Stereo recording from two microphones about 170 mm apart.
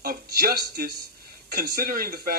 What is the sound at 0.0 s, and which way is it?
A man's voice, 65° right (ahead or behind).